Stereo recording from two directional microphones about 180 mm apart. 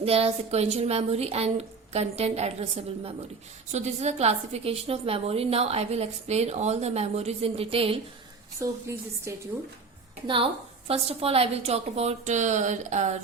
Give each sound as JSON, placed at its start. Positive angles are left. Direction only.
{"t": 0.0, "sound": "a woman's voice", "side_deg": -35}
{"t": 8.6, "sound": "a woman's voice", "side_deg": -15}
{"t": 10.2, "sound": "a woman's voice", "side_deg": -30}